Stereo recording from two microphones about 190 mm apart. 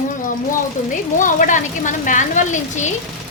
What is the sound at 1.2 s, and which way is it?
A woman's voice, 45° left (ahead or behind).